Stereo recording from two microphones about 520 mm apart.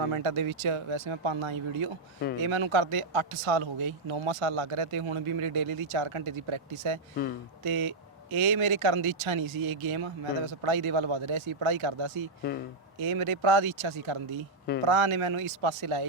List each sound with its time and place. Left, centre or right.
0.0 s speech: right